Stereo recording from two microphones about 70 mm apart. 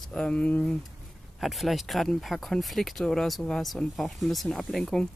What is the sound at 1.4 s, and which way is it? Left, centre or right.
Speech, centre.